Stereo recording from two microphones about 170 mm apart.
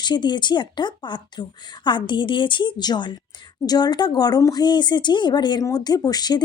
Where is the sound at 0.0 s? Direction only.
25° left (ahead or behind).